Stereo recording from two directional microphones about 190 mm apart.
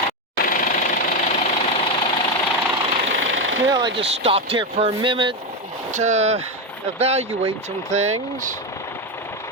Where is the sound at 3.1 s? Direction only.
90° right.